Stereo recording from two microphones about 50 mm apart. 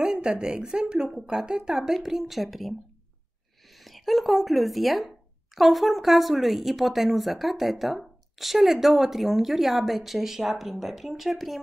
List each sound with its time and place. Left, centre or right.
0.0 s a woman's voice: centre
3.7 s speech: centre